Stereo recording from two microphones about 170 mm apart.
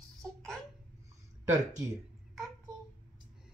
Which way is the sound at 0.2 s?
Centre (ahead or behind).